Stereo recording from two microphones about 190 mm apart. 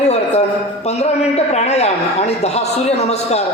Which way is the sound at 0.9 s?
35° left (ahead or behind).